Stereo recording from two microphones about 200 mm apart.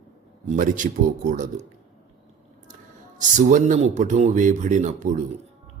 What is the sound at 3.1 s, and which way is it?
A man's voice, 40° right (ahead or behind).